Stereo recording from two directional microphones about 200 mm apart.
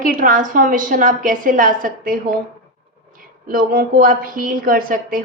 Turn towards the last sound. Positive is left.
turn(degrees=-45)  # may be behind; listen again after turning